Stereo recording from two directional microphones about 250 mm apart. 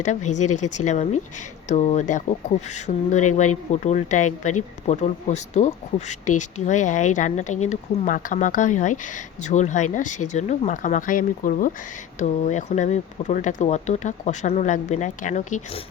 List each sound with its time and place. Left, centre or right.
0.0 s speech: left
0.3 s speech: left
1.6 s speech: left